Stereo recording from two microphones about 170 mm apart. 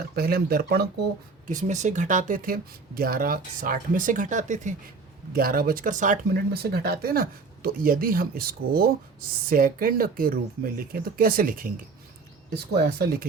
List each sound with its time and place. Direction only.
0.2 s speech: 65° right (ahead or behind)
1.5 s speech: 45° right (ahead or behind)
5.3 s speech: 60° right (ahead or behind)
6.5 s speech: 65° right (ahead or behind)
12.5 s speech: 75° right (ahead or behind)